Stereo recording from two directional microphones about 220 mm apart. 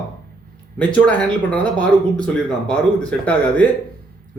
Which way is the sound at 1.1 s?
5° left (ahead or behind).